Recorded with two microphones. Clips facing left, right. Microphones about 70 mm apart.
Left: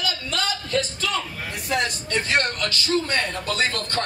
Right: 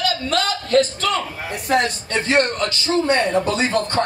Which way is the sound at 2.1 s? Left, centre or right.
Right.